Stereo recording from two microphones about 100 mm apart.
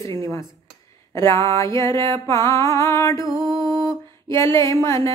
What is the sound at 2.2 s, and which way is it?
Music, 30° left (ahead or behind).